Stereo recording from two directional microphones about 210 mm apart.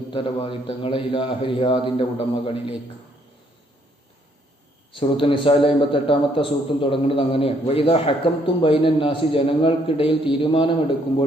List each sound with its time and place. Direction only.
0.1 s a man's voice: 25° left (ahead or behind)
4.9 s a man's voice: 25° left (ahead or behind)